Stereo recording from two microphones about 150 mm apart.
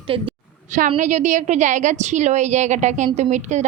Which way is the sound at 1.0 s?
55° right (ahead or behind).